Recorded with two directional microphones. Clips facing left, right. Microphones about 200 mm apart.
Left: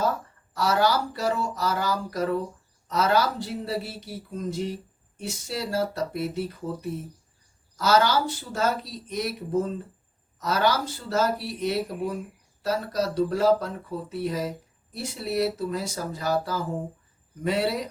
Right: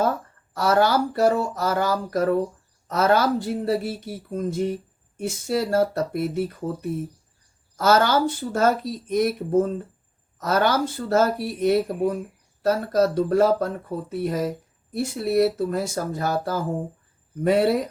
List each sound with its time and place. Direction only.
0.5 s speech: 55° right (ahead or behind)
7.8 s speech: 50° right (ahead or behind)